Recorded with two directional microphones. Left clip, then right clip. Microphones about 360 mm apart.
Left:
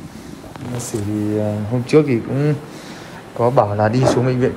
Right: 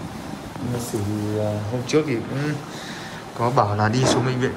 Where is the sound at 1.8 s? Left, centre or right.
Centre.